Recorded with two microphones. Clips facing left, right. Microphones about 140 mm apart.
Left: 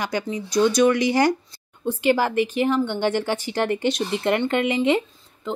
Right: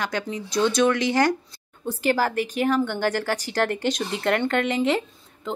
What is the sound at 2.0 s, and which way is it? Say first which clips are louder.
Speech: left 3 dB; 45° right (ahead or behind).